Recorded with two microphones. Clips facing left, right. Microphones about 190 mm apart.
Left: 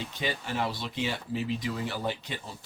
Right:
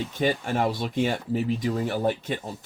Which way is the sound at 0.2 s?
50° right (ahead or behind).